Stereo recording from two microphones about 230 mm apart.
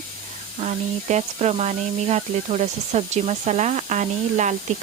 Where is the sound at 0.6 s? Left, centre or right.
Right.